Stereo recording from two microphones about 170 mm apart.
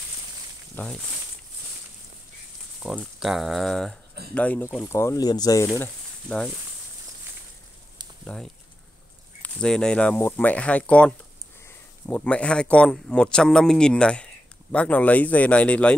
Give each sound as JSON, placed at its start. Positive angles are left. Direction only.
{"t": 0.8, "sound": "speech", "side_deg": 10}
{"t": 2.8, "sound": "speech", "side_deg": -5}
{"t": 5.8, "sound": "speech", "side_deg": 5}
{"t": 8.3, "sound": "speech", "side_deg": 5}